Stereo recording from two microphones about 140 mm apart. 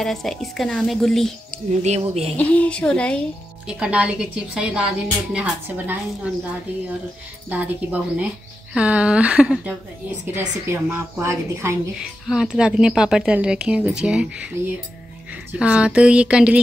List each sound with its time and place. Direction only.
0.0 s a woman's voice: centre (ahead or behind)
1.7 s speech: 55° right (ahead or behind)
2.3 s a woman's voice: 10° left (ahead or behind)
3.6 s a woman's voice: 10° right (ahead or behind)
7.4 s a woman's voice: 10° right (ahead or behind)
12.0 s a woman's voice: 5° right (ahead or behind)
15.6 s a woman's voice: 10° right (ahead or behind)